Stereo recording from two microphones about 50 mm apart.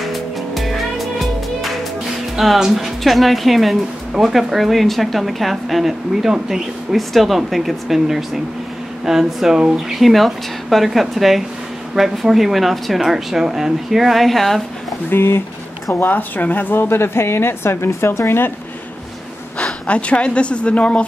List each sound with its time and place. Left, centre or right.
0.0 s music: centre
2.3 s speech: centre
10.0 s speech: centre
15.0 s a woman's voice: left
15.9 s a woman's voice: left
19.9 s a woman's voice: left